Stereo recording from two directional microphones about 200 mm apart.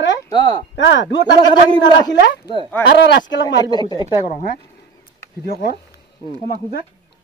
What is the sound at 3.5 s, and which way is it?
Speech, 20° left (ahead or behind).